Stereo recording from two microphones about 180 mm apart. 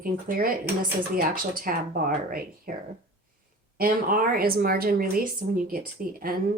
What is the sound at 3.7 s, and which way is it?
Speech, 50° right (ahead or behind).